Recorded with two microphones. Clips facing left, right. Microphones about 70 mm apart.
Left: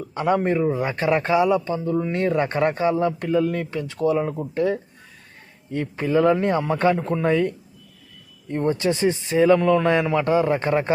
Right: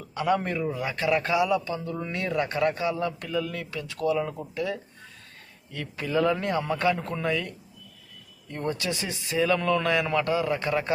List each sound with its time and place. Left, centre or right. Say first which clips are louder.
0.1 s a man's voice: left 5 dB; left
1.9 s a man's voice: left 10 dB; centre
2.1 s a man's voice: left 3 dB; left
7.3 s a man's voice: left 9 dB; left